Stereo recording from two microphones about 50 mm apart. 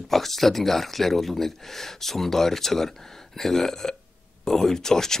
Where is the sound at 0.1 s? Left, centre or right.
Centre.